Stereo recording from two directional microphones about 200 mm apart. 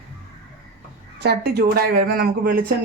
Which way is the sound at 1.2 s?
55° right (ahead or behind).